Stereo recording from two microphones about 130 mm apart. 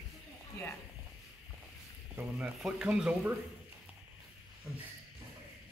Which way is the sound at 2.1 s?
15° right (ahead or behind).